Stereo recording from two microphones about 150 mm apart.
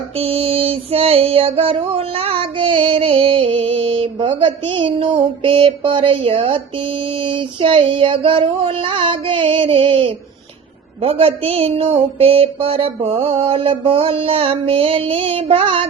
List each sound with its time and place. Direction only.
0.2 s female singing: 40° right (ahead or behind)